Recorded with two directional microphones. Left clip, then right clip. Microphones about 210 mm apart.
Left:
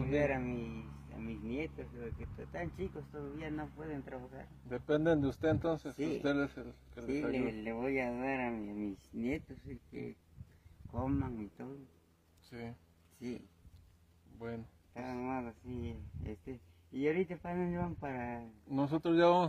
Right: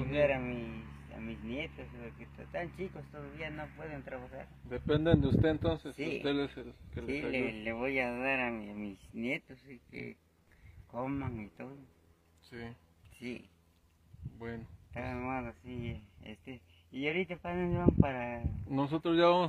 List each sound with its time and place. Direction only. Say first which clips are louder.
0.1 s speech: right 4 dB; 5° left (ahead or behind)
4.6 s speech: right 1 dB; 45° left (ahead or behind)
7.1 s speech: right 1 dB; 5° left (ahead or behind)
12.4 s speech: right 1 dB; 50° left (ahead or behind)
15.0 s speech: right 2 dB; centre (ahead or behind)
18.7 s speech: right 1 dB; 45° left (ahead or behind)